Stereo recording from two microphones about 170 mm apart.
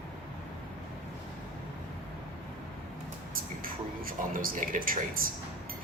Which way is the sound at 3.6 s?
55° right (ahead or behind).